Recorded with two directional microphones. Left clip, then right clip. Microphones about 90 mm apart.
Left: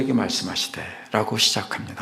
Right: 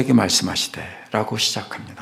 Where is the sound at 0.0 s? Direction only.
55° right (ahead or behind).